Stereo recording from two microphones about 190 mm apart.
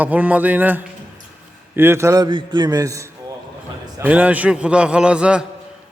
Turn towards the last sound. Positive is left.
turn(degrees=-5)  # may be behind; listen again after turning